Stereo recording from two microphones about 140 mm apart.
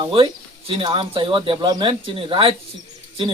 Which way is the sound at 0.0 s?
40° right (ahead or behind).